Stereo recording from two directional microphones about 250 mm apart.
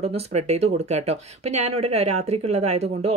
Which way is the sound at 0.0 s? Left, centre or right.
Right.